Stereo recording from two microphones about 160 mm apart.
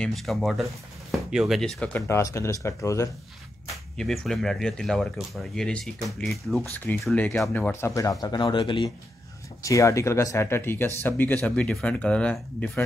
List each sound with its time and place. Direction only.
0.0 s speech: centre (ahead or behind); by 3.1 s 20° left (ahead or behind)
3.9 s speech: 5° left (ahead or behind); by 8.9 s 30° left (ahead or behind)
9.6 s speech: 20° left (ahead or behind)